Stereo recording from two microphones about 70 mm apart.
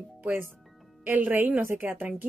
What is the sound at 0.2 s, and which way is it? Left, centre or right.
A woman's voice, right.